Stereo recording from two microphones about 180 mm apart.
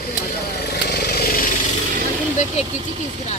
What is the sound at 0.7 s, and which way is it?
Vehicle, 60° left (ahead or behind).